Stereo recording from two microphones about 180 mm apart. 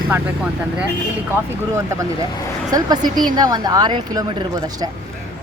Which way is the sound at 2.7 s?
20° right (ahead or behind).